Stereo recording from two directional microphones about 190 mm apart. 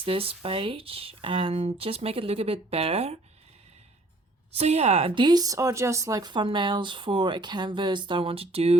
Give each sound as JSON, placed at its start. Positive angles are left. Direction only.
{"t": 0.0, "sound": "speech", "side_deg": -30}
{"t": 4.5, "sound": "speech", "side_deg": -35}